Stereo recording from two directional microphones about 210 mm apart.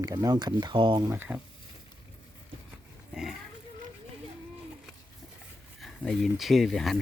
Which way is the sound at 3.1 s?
Centre (ahead or behind).